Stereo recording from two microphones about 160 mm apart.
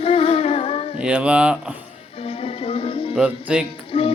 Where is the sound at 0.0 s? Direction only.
35° left (ahead or behind).